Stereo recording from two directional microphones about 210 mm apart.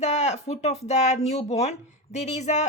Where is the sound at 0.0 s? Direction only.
35° left (ahead or behind).